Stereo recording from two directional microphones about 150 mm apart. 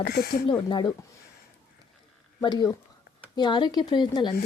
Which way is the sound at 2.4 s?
30° left (ahead or behind).